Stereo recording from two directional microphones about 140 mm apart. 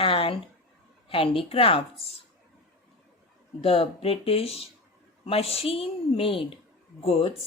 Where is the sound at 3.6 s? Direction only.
45° left (ahead or behind).